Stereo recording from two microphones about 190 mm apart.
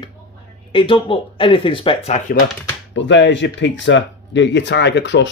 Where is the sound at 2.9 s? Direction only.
70° left (ahead or behind).